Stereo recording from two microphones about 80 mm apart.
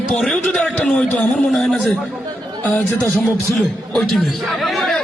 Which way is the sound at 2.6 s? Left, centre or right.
Left.